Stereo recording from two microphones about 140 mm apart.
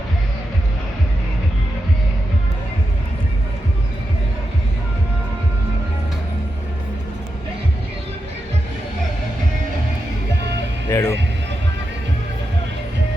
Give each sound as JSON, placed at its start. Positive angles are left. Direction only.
{"t": 10.8, "sound": "music", "side_deg": 20}